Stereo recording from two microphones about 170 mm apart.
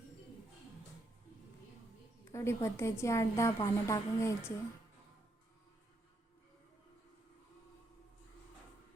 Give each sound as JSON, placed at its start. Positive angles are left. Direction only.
{"t": 2.3, "sound": "a woman's voice", "side_deg": 15}